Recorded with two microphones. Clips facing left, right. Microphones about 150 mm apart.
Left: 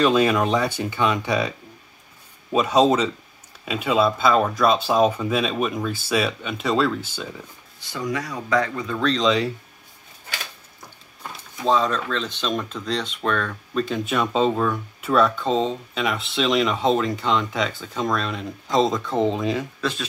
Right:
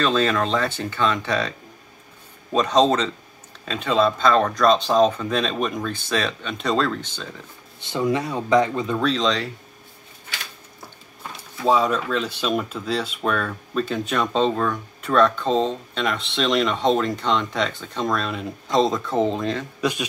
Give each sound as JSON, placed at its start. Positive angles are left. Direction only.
{"t": 0.0, "sound": "speech", "side_deg": 15}
{"t": 2.5, "sound": "speech", "side_deg": 10}
{"t": 7.8, "sound": "speech", "side_deg": -25}
{"t": 9.0, "sound": "speech", "side_deg": 0}
{"t": 11.6, "sound": "speech", "side_deg": -10}
{"t": 19.8, "sound": "speech", "side_deg": -15}